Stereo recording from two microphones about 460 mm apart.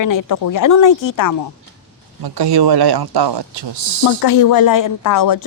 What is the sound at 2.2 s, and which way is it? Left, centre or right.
Speech, right.